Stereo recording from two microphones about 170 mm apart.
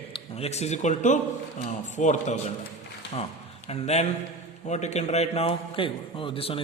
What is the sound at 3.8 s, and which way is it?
A man's voice, 40° left (ahead or behind).